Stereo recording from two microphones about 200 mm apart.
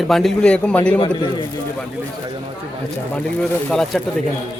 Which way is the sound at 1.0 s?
25° left (ahead or behind).